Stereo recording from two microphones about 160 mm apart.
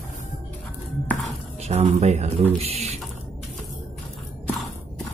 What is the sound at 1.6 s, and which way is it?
Speech, 40° right (ahead or behind).